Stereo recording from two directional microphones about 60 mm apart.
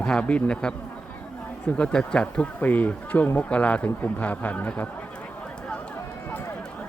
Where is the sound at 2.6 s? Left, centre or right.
Left.